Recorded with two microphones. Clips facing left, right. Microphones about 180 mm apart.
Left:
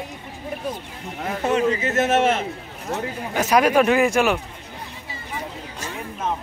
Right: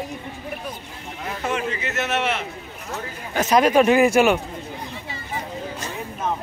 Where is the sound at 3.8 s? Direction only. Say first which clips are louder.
Right 2 dB; 5° right (ahead or behind).